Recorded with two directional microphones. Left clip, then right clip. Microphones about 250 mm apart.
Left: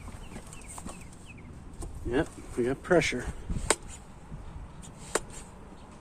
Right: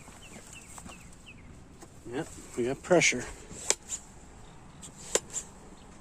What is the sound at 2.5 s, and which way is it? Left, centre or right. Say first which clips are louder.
Speech: even; right.